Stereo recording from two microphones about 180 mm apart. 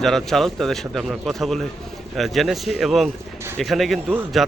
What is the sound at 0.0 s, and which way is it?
A man's voice, centre (ahead or behind).